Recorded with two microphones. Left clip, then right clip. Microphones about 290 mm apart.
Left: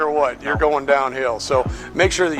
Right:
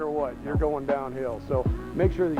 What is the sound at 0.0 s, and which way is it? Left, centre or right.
Speech, centre.